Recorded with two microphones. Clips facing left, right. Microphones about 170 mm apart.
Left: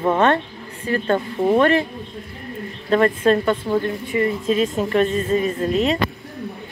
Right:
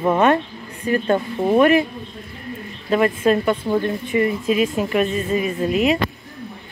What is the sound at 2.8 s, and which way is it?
A woman's voice, 10° right (ahead or behind).